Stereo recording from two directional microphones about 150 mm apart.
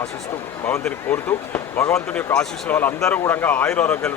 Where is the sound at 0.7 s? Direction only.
15° left (ahead or behind).